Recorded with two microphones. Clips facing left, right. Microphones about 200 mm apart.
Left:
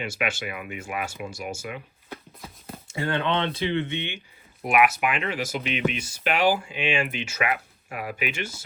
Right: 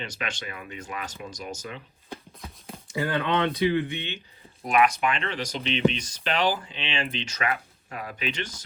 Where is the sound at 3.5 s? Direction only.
25° left (ahead or behind).